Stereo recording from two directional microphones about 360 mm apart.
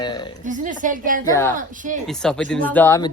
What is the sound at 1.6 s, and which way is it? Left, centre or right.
Speech, right.